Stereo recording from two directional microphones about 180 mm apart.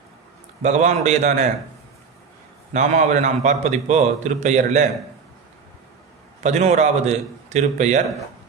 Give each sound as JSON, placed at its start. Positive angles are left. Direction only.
{"t": 0.6, "sound": "a man's voice", "side_deg": -40}
{"t": 2.7, "sound": "a man's voice", "side_deg": -40}
{"t": 6.4, "sound": "a man's voice", "side_deg": -40}